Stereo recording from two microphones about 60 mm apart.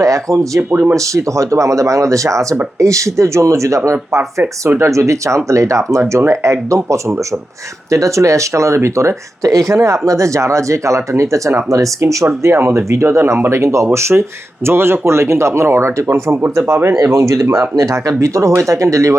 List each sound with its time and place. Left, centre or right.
0.0 s speech: right
0.7 s speech: right
0.9 s speech: right